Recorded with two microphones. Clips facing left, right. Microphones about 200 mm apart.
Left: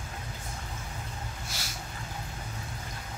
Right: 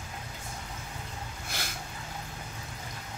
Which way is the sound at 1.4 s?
55° right (ahead or behind).